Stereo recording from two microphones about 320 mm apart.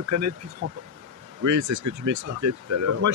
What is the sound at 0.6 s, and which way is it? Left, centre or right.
Speech, right.